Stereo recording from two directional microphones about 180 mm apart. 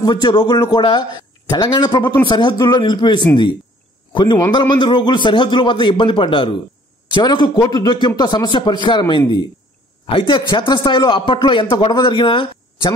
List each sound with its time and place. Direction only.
0.0 s a man's voice: 25° left (ahead or behind)